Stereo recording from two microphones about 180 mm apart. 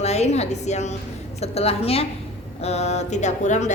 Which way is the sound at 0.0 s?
35° left (ahead or behind).